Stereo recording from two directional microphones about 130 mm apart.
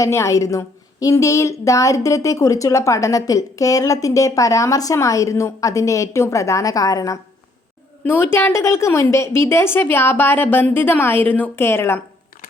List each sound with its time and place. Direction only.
0.0 s a woman's voice: 20° left (ahead or behind)